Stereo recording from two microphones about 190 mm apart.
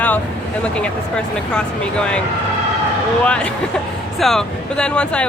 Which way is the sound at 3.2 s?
5° left (ahead or behind).